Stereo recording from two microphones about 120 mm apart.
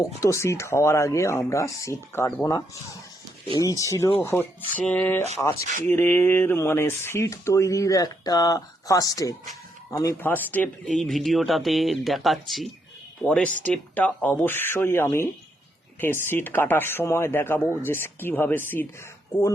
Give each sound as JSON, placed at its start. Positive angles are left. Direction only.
{"t": 0.2, "sound": "speech", "side_deg": 25}
{"t": 3.6, "sound": "speech", "side_deg": 25}
{"t": 5.4, "sound": "speech", "side_deg": 25}
{"t": 10.2, "sound": "speech", "side_deg": 15}
{"t": 10.9, "sound": "speech", "side_deg": 5}
{"t": 16.3, "sound": "speech", "side_deg": 15}